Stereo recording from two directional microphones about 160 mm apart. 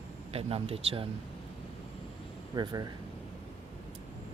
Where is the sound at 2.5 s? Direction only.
25° right (ahead or behind).